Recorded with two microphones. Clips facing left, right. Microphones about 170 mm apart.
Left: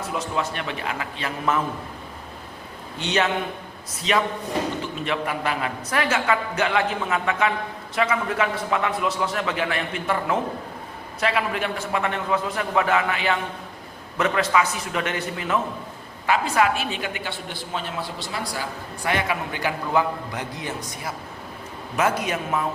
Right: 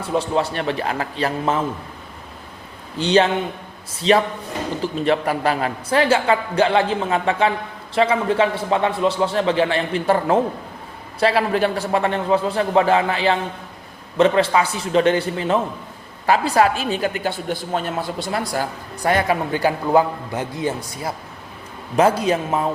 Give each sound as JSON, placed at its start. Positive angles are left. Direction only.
{"t": 0.0, "sound": "a woman's voice", "side_deg": -30}
{"t": 3.0, "sound": "a woman's voice", "side_deg": -30}